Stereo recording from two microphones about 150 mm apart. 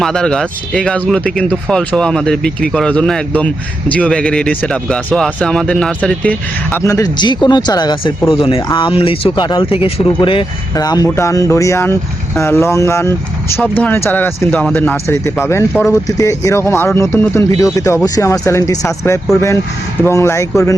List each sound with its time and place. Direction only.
0.0 s speech: 5° left (ahead or behind); by 20.5 s 20° left (ahead or behind)